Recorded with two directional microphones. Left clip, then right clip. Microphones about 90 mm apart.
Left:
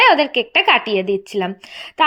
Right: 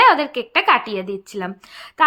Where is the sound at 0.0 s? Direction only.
30° left (ahead or behind).